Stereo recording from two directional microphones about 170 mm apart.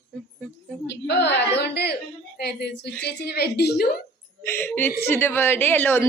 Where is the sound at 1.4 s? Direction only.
75° left (ahead or behind).